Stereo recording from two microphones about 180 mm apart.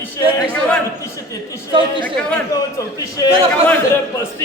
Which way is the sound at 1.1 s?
15° left (ahead or behind).